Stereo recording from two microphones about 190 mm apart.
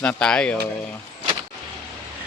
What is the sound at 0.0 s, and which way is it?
Speech, 5° left (ahead or behind).